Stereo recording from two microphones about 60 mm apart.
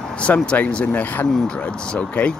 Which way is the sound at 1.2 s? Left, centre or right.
Centre.